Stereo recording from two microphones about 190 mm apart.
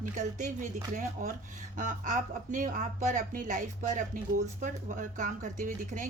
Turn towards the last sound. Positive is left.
turn(degrees=-40)  # may be behind; listen again after turning